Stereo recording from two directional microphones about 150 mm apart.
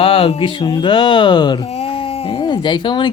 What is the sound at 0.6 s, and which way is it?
Speech, 30° left (ahead or behind).